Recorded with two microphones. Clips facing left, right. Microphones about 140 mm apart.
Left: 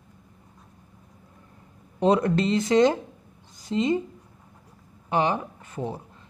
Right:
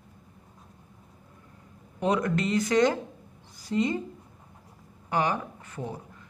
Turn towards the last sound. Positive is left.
turn(degrees=25)  # may be behind; listen again after turning